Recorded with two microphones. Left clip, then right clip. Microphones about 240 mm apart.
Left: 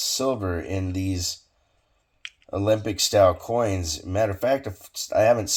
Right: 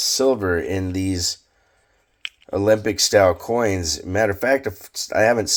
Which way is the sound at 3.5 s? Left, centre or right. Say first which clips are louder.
Right 4 dB; right.